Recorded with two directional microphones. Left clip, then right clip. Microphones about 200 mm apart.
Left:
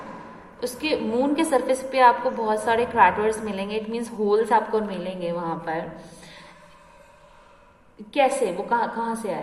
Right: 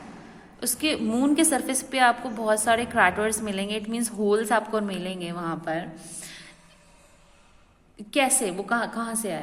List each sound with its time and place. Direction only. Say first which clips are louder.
0.6 s a woman's voice: left 2 dB; 45° right (ahead or behind)
8.1 s a woman's voice: left 3 dB; 45° right (ahead or behind)